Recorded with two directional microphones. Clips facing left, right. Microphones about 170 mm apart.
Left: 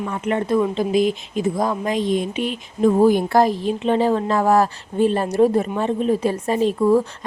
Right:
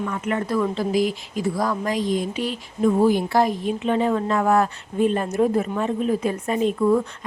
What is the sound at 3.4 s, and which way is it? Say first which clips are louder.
A woman's voice: left 3 dB; 30° left (ahead or behind).